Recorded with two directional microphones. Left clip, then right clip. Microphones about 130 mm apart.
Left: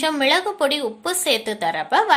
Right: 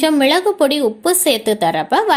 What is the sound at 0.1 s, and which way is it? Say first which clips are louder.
A woman's voice: right 5 dB; 30° right (ahead or behind).